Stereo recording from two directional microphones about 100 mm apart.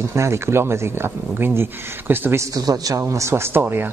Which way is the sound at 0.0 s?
30° right (ahead or behind).